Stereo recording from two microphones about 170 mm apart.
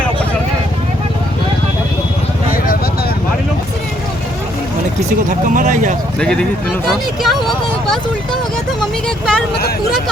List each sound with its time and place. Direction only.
5.3 s speech: 50° right (ahead or behind)
6.1 s speech: 5° left (ahead or behind)